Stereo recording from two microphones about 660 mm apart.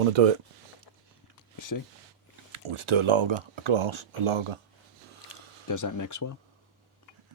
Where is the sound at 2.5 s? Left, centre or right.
Right.